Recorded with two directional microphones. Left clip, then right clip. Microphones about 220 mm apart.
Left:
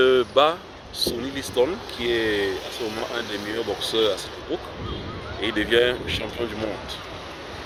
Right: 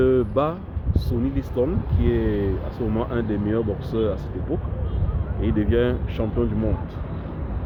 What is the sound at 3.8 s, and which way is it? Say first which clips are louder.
Speech: left 3 dB; 5° left (ahead or behind).